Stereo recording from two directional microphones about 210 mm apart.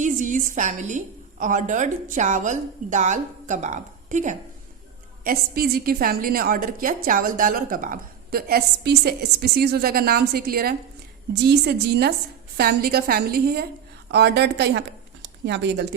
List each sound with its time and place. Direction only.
0.0 s a woman's voice: 35° right (ahead or behind)
5.2 s a woman's voice: 45° right (ahead or behind)